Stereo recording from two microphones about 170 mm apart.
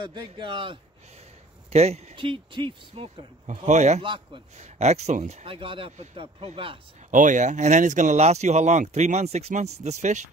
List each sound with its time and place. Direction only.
0.0 s speech: 25° right (ahead or behind)
1.7 s speech: 40° right (ahead or behind)
3.4 s speech: 45° right (ahead or behind)
4.0 s speech: 30° right (ahead or behind)
4.6 s speech: 40° right (ahead or behind)
7.1 s speech: 50° right (ahead or behind)